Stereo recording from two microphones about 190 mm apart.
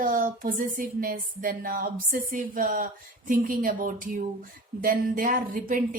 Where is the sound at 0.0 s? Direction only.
45° right (ahead or behind).